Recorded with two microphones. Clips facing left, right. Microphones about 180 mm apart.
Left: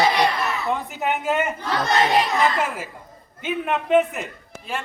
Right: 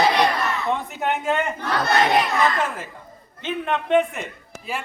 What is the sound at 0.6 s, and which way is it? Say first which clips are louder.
Speech: even; centre (ahead or behind).